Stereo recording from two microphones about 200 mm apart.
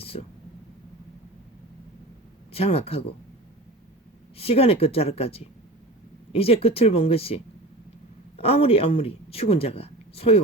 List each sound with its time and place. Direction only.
0.0 s a sound: 30° left (ahead or behind)
2.5 s speech: 30° left (ahead or behind)
4.4 s speech: 30° left (ahead or behind)